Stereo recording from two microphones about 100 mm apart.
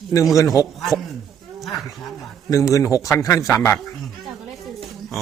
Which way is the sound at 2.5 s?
30° left (ahead or behind).